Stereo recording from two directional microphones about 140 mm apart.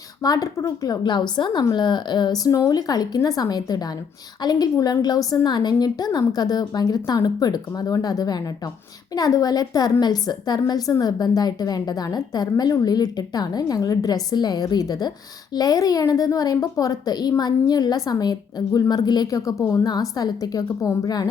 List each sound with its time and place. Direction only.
0.2 s a woman's voice: 25° left (ahead or behind)